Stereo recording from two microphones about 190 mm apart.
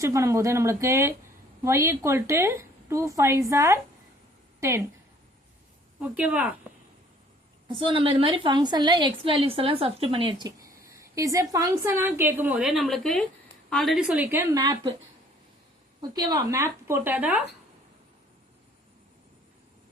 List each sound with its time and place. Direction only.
0.0 s a woman's voice: 15° right (ahead or behind)
6.0 s a woman's voice: 5° right (ahead or behind)
7.7 s a woman's voice: 25° right (ahead or behind)
16.0 s a woman's voice: 20° right (ahead or behind)